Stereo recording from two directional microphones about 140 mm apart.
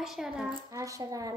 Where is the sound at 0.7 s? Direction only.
25° right (ahead or behind).